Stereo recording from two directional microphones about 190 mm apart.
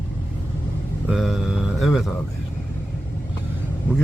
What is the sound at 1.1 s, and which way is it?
Speech, centre (ahead or behind).